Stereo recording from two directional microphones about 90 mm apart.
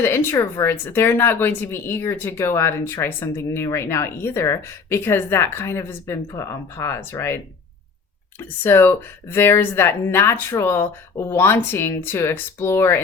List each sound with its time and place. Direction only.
0.0 s speech: 25° left (ahead or behind)
8.6 s speech: 25° left (ahead or behind)